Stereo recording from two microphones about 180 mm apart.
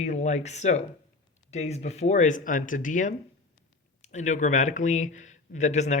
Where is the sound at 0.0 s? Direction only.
40° left (ahead or behind).